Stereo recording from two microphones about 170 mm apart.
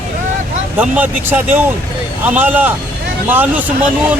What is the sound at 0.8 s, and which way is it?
Speech, 10° right (ahead or behind).